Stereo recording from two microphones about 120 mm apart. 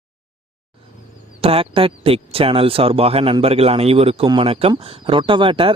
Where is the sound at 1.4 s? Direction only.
50° right (ahead or behind).